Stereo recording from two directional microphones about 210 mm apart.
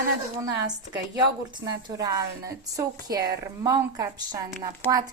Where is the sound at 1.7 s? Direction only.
15° right (ahead or behind).